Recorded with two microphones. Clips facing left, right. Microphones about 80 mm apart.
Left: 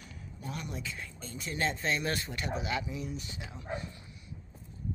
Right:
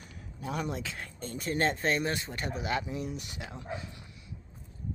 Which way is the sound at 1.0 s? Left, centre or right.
Right.